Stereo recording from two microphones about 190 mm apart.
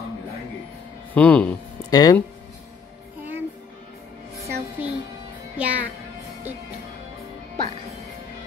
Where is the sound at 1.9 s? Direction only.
20° left (ahead or behind).